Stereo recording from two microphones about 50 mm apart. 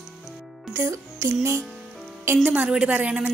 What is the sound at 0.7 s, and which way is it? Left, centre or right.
Music, right.